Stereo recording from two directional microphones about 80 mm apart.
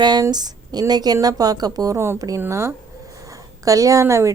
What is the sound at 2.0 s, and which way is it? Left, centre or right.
A woman's voice, right.